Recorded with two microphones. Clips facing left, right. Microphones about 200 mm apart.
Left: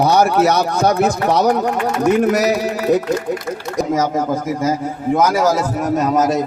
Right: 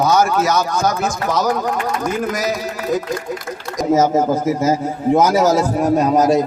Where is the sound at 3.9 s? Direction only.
25° right (ahead or behind).